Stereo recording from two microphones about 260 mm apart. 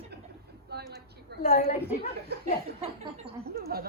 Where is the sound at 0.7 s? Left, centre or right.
Right.